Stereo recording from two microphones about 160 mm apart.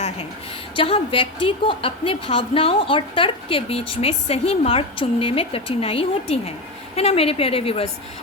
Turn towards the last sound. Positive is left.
turn(degrees=35)  # may be behind; listen again after turning